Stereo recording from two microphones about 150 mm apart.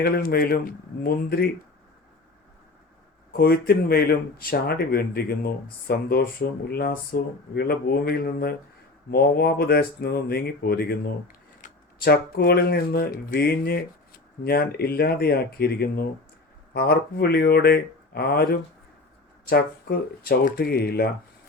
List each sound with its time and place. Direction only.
0.0 s speech: 90° left
3.3 s speech: 90° left